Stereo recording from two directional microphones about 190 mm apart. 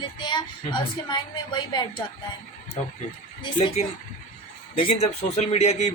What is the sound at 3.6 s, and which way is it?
A man's voice, 35° left (ahead or behind).